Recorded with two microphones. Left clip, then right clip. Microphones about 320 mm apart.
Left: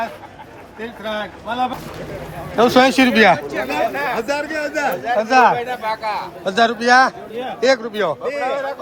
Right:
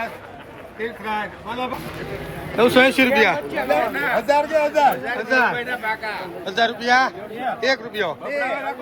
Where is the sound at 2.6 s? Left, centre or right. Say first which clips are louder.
Left 2 dB; left.